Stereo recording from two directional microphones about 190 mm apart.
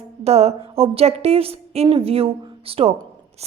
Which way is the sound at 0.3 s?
35° right (ahead or behind).